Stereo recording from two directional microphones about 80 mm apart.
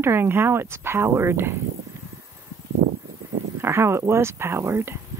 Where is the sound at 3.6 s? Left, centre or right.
Right.